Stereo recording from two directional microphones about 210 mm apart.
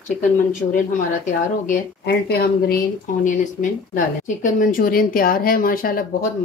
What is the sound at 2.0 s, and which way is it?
Speech, 50° left (ahead or behind).